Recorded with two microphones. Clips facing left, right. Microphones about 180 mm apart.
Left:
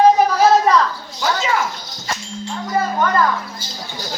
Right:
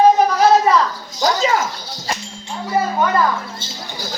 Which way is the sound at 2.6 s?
5° right (ahead or behind).